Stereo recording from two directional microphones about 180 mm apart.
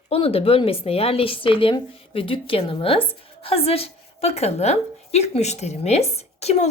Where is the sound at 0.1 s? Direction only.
35° left (ahead or behind).